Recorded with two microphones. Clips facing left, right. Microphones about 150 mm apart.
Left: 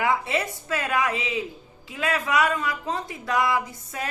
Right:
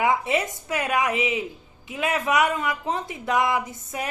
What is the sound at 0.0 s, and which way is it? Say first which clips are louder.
A woman's voice: right 2 dB; 20° right (ahead or behind).